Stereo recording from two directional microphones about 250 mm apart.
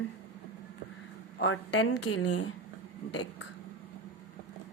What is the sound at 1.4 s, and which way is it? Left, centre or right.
A woman's voice, left.